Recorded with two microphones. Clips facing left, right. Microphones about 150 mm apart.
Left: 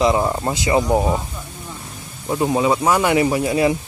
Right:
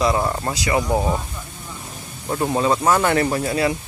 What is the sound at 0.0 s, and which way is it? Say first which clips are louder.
Speech: left 3 dB; 15° left (ahead or behind).